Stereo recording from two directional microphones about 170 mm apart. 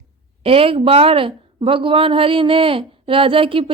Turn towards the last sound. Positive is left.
turn(degrees=-30)  # may be behind; listen again after turning